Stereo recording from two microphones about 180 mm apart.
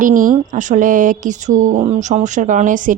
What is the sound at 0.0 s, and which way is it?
Speech, 50° right (ahead or behind).